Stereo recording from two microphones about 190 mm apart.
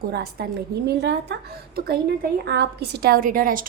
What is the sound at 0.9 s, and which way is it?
A woman's voice, 65° right (ahead or behind).